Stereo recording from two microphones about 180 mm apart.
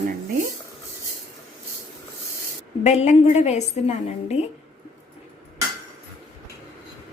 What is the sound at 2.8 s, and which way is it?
A woman's voice, 40° left (ahead or behind).